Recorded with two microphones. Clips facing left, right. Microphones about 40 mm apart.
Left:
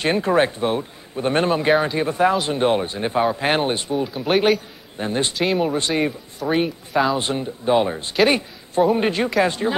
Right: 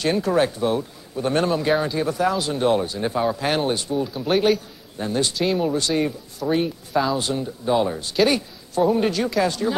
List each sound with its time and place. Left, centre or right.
0.0 s speech: left